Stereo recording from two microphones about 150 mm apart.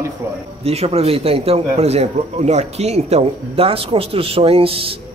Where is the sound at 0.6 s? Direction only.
45° right (ahead or behind).